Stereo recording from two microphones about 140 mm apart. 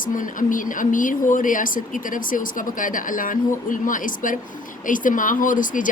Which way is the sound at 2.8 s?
75° left (ahead or behind).